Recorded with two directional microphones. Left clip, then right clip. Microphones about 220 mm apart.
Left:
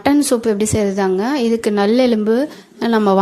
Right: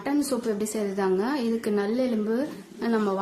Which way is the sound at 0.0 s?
35° left (ahead or behind).